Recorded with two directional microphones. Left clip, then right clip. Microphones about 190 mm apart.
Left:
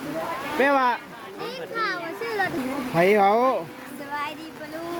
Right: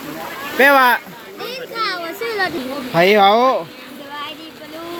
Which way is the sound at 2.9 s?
Centre (ahead or behind).